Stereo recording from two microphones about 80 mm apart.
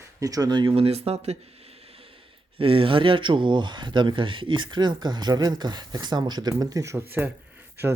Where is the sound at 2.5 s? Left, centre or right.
Right.